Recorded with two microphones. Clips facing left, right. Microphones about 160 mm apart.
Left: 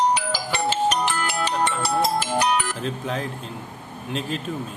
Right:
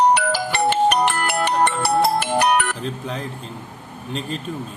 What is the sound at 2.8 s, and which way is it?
Speech, centre (ahead or behind).